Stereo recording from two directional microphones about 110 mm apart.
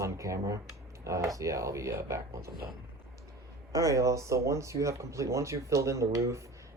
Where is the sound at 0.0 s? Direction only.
30° right (ahead or behind).